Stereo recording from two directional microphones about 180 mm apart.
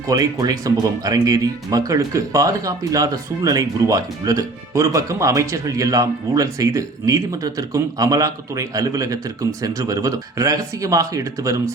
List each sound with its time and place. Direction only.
0.1 s speech: 20° right (ahead or behind)